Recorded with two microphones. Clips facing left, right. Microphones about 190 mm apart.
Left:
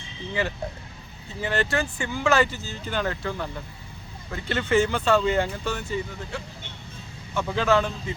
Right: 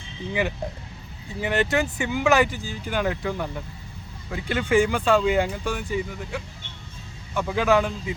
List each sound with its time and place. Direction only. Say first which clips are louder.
1.4 s speech: right 3 dB; 15° right (ahead or behind)